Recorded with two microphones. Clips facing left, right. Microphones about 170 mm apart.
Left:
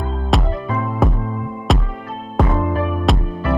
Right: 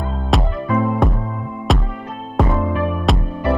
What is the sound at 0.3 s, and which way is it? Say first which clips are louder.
Music: right 2 dB; centre (ahead or behind).